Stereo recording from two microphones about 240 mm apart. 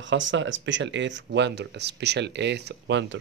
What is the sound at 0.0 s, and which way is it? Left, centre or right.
Speech, right.